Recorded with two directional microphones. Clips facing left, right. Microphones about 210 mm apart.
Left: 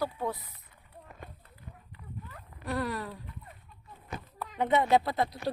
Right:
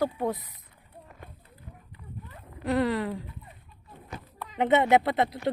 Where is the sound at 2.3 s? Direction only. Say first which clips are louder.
Right 8 dB; 20° right (ahead or behind).